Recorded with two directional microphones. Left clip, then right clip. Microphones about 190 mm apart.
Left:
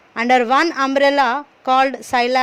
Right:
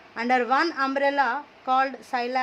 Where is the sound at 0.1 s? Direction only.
40° left (ahead or behind).